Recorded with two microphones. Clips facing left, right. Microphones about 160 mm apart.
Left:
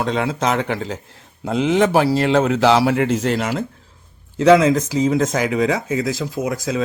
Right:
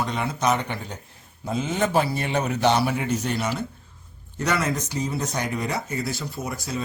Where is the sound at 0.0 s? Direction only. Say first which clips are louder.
Left 5 dB; 90° left.